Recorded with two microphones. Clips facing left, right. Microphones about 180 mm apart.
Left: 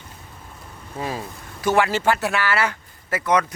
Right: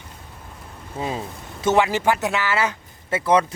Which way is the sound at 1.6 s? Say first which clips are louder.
Right 1 dB; 20° right (ahead or behind).